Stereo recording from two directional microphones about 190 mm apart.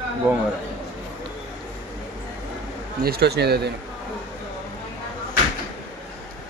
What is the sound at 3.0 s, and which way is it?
Speech, 55° right (ahead or behind).